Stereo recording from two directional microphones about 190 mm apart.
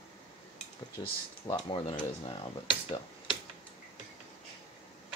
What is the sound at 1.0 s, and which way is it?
Speech, 20° left (ahead or behind).